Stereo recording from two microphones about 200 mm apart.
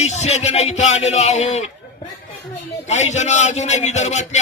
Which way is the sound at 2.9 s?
35° left (ahead or behind).